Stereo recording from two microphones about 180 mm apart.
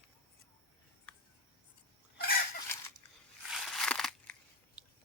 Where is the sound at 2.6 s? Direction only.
15° left (ahead or behind).